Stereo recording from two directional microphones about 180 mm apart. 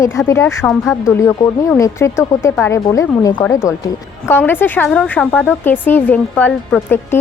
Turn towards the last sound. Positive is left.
turn(degrees=10)  # may be behind; listen again after turning